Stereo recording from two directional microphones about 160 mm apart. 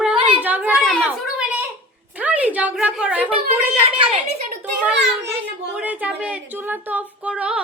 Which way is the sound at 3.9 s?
35° right (ahead or behind).